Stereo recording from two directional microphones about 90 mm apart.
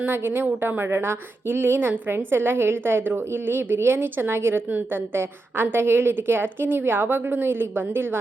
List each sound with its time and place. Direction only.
0.0 s a woman's voice: 25° right (ahead or behind)